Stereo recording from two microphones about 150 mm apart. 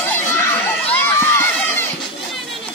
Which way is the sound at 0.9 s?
15° left (ahead or behind).